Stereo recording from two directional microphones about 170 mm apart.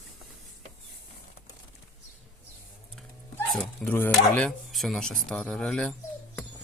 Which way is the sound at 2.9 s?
5° left (ahead or behind).